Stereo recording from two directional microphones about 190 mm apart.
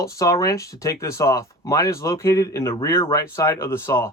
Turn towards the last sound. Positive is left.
turn(degrees=15)  # may be behind; listen again after turning